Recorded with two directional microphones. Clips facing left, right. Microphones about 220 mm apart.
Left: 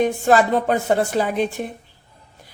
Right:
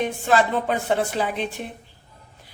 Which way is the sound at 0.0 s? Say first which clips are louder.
Left 4 dB; 40° left (ahead or behind).